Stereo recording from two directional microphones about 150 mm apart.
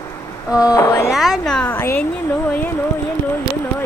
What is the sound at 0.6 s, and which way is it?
Speech, 20° left (ahead or behind).